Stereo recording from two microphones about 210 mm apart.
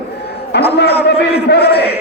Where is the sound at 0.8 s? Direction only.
50° left (ahead or behind).